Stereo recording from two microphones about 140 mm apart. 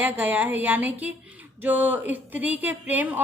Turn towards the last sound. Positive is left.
turn(degrees=-10)  # may be behind; listen again after turning